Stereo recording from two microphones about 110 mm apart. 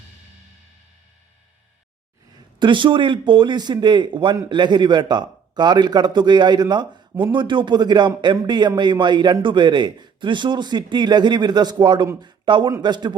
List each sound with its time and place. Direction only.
2.6 s speech: 45° right (ahead or behind)